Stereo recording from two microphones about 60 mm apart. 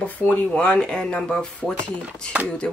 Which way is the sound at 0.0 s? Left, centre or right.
Left.